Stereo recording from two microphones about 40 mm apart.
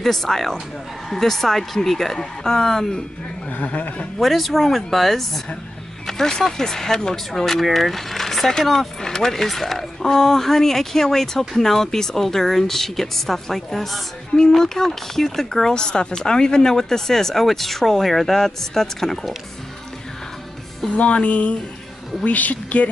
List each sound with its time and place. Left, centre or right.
0.0 s speech: centre
3.4 s speech: left
4.2 s speech: centre
14.3 s speech: centre
20.9 s speech: left